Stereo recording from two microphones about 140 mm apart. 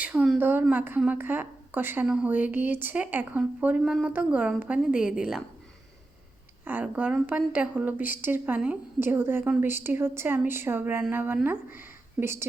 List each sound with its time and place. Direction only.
0.0 s a woman's voice: 10° right (ahead or behind)
6.7 s a woman's voice: 10° right (ahead or behind)